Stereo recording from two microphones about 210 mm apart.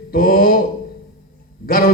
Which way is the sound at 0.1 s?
45° left (ahead or behind).